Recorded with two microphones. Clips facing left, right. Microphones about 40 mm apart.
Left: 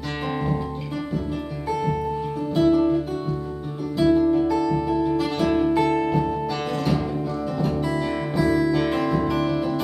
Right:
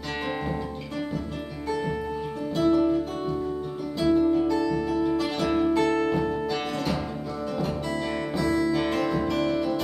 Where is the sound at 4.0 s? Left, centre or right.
Centre.